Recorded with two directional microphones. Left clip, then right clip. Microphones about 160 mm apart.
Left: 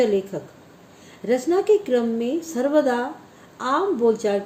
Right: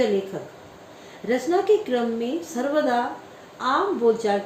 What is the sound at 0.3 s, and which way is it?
Speech, 60° left (ahead or behind).